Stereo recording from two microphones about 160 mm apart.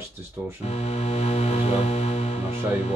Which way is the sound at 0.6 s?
40° left (ahead or behind).